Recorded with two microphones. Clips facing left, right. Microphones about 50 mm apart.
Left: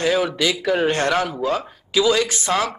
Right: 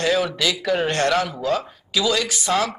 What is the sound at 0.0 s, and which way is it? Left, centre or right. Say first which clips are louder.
Speech: left 1 dB; centre.